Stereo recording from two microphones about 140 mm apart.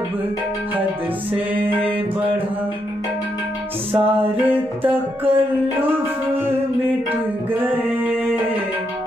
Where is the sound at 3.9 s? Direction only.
45° right (ahead or behind).